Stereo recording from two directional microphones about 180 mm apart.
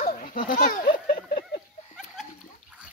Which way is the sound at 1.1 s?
60° left (ahead or behind).